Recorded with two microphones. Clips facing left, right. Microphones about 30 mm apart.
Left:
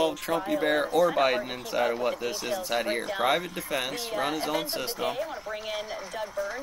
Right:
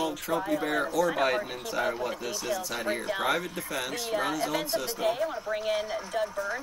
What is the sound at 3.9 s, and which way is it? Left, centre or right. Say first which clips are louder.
Speech: even; centre.